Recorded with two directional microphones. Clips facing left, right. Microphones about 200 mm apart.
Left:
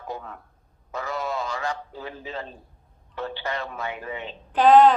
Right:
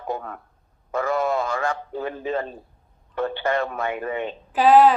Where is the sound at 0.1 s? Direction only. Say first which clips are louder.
Right 6 dB; 55° right (ahead or behind).